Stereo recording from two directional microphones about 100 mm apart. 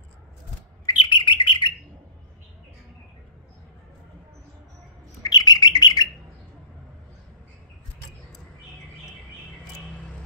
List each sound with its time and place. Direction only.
0.8 s bird: 55° left (ahead or behind)
5.2 s bird: 45° left (ahead or behind)